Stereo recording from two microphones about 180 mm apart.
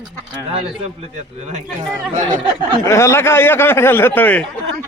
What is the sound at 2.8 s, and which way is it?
Speech, 15° left (ahead or behind).